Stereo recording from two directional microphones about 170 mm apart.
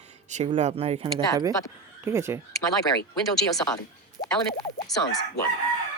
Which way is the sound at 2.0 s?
15° right (ahead or behind).